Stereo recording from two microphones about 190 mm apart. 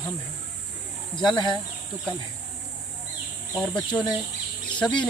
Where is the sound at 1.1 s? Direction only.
25° left (ahead or behind).